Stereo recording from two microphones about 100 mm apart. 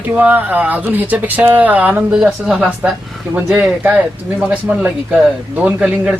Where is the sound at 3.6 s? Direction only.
10° right (ahead or behind).